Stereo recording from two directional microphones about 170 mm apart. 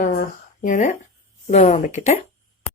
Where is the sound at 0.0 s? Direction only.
50° left (ahead or behind).